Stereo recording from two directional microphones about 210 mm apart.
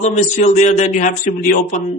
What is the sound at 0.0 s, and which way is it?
Speech, 35° left (ahead or behind).